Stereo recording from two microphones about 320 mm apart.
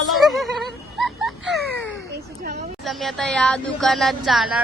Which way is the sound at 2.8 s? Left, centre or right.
Centre.